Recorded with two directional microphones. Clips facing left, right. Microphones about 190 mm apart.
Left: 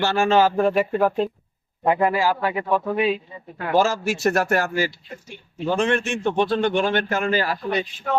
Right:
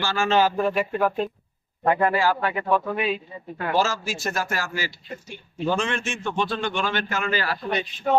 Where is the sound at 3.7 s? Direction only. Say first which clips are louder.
Left 5 dB; 55° left (ahead or behind).